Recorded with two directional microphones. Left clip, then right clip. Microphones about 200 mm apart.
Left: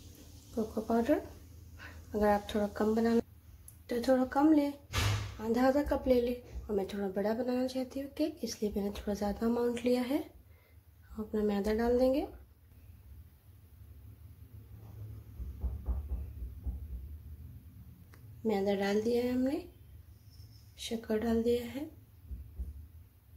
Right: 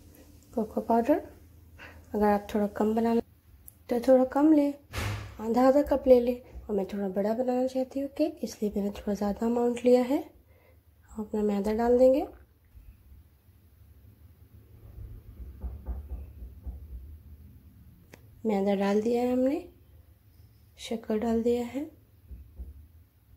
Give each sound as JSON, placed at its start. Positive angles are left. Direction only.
{"t": 0.8, "sound": "a woman's voice", "side_deg": -15}
{"t": 11.3, "sound": "a woman's voice", "side_deg": -15}
{"t": 18.5, "sound": "a woman's voice", "side_deg": -25}
{"t": 20.7, "sound": "a woman's voice", "side_deg": -20}